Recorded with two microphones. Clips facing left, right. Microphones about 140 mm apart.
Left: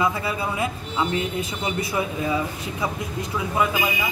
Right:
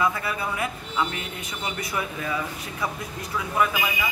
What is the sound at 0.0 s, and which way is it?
A man's voice, 25° left (ahead or behind).